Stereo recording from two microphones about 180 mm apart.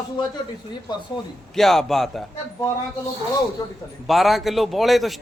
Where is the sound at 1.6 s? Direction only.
Centre (ahead or behind).